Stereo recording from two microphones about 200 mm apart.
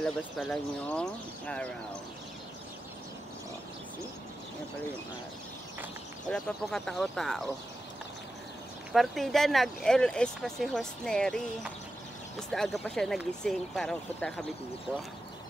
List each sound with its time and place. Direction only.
0.0 s speech: 5° left (ahead or behind)
6.2 s speech: 5° left (ahead or behind)
8.9 s speech: centre (ahead or behind)